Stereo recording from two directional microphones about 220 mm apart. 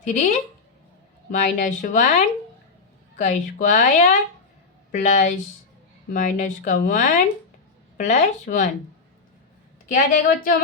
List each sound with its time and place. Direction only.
0.0 s speech: 35° left (ahead or behind)
3.2 s speech: 35° left (ahead or behind)
9.9 s speech: 40° left (ahead or behind)